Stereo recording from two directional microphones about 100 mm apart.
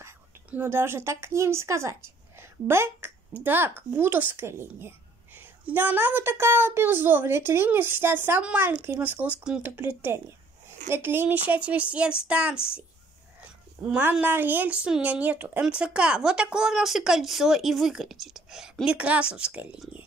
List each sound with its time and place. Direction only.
0.5 s speech: 25° right (ahead or behind)
13.4 s a sound: 20° right (ahead or behind)
14.2 s speech: 20° right (ahead or behind)